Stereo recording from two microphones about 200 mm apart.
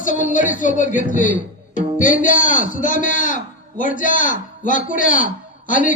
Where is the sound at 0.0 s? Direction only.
40° left (ahead or behind).